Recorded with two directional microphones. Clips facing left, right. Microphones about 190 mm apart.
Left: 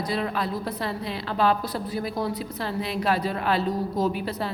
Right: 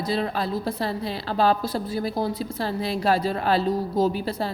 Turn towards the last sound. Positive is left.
turn(degrees=-35)  # may be behind; listen again after turning